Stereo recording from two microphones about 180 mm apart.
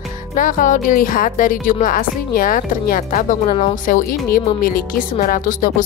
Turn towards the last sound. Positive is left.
turn(degrees=50)  # may be behind; listen again after turning